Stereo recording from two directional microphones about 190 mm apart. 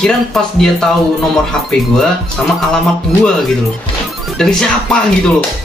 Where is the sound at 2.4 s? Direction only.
5° left (ahead or behind).